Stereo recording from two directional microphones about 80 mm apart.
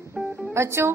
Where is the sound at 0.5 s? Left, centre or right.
Right.